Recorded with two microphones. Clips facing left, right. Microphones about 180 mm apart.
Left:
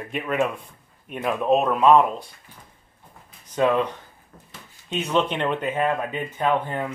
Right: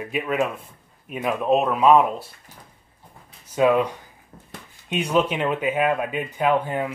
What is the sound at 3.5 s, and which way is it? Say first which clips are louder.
Speech: right 2 dB; 10° right (ahead or behind).